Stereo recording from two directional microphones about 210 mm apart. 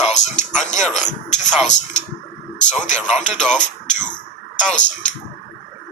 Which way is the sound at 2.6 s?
35° left (ahead or behind).